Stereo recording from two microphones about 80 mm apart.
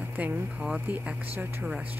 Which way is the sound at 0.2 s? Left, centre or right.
Centre.